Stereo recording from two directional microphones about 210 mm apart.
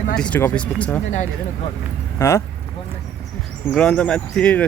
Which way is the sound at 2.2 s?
15° left (ahead or behind).